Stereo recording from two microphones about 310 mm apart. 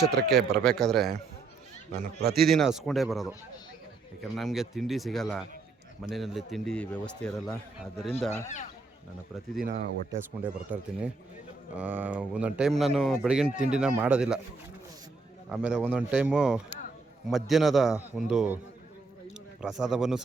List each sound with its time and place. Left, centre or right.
0.0 s speech: right
0.6 s speech: centre
1.9 s speech: right
2.3 s speech: centre
9.6 s speech: right
10.1 s speech: centre
15.4 s speech: centre
19.6 s speech: centre